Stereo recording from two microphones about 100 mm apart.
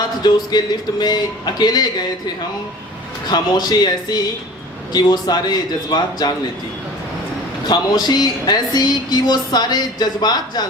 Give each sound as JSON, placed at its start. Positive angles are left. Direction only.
{"t": 0.2, "sound": "speech", "side_deg": 45}
{"t": 3.2, "sound": "speech", "side_deg": 45}
{"t": 7.7, "sound": "speech", "side_deg": 45}